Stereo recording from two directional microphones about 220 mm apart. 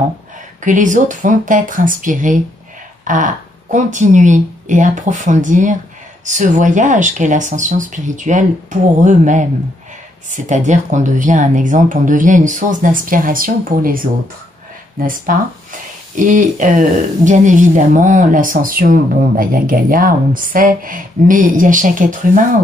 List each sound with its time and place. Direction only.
0.7 s speech: 35° right (ahead or behind)